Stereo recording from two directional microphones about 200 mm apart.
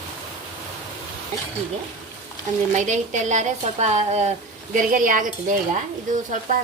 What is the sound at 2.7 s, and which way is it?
A woman's voice, 40° right (ahead or behind).